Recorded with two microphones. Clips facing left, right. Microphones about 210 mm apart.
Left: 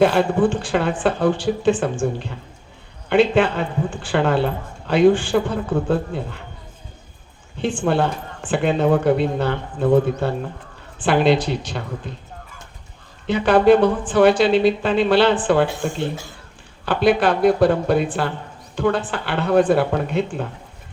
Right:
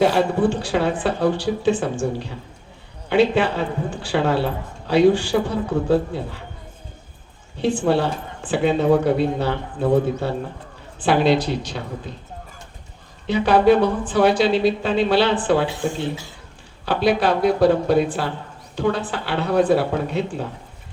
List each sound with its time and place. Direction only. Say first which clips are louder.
0.1 s speech: left 1 dB; 55° left (ahead or behind)
7.6 s speech: right 1 dB; 55° left (ahead or behind)
13.2 s speech: left 1 dB; 55° left (ahead or behind)